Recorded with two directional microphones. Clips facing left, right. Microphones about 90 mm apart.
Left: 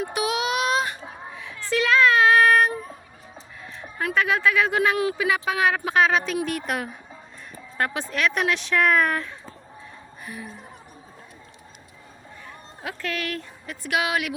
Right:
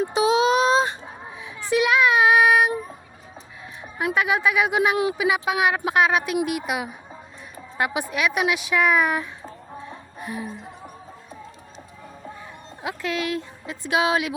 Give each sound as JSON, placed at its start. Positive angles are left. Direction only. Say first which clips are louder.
{"t": 0.0, "sound": "a sound", "louder": "right 6 dB", "side_deg": -25}
{"t": 1.3, "sound": "child singing", "louder": "right 3 dB", "side_deg": -15}
{"t": 3.8, "sound": "speech", "louder": "right 1 dB", "side_deg": -15}
{"t": 12.8, "sound": "a woman's voice", "louder": "right 3 dB", "side_deg": -20}